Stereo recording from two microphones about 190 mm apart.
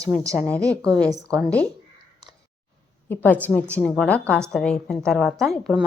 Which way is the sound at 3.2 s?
10° left (ahead or behind).